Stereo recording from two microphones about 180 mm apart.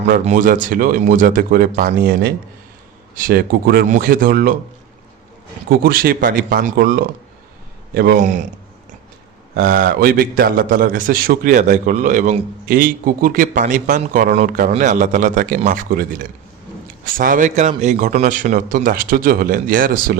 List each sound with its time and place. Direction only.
0.3 s a man's voice: 45° right (ahead or behind)
3.8 s a man's voice: 50° right (ahead or behind)
5.6 s a man's voice: 55° right (ahead or behind)
9.6 s a man's voice: 55° right (ahead or behind); by 17.9 s 40° right (ahead or behind)
17.9 s a man's voice: 55° right (ahead or behind)